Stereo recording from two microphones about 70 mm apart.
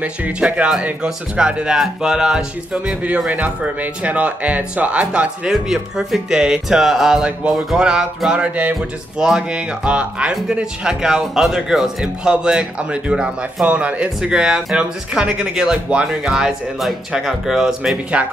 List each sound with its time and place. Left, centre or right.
0.0 s speech: centre
5.5 s speech: centre
18.1 s speech: centre